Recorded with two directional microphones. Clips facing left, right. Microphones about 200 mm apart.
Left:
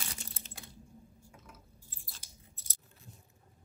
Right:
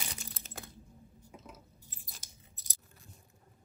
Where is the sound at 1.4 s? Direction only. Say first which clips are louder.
Right 4 dB; 20° right (ahead or behind).